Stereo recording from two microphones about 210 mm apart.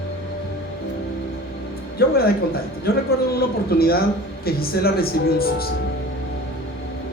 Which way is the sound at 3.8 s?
45° left (ahead or behind).